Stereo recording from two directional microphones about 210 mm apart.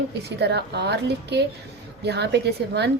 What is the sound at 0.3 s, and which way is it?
A woman's voice, 55° right (ahead or behind).